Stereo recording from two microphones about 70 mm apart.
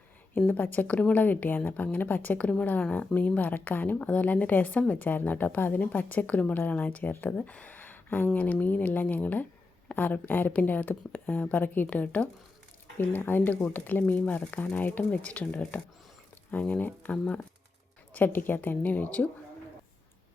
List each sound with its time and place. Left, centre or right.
0.3 s a woman's voice: left
18.1 s a woman's voice: left